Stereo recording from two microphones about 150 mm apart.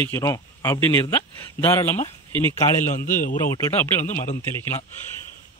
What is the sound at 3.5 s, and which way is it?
Speech, 15° left (ahead or behind).